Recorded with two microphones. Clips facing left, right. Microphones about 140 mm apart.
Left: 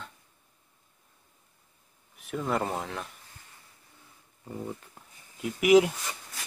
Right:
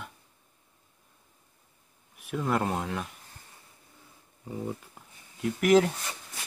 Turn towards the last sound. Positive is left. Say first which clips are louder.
# left 2 dB
turn(degrees=10)  # may be behind; listen again after turning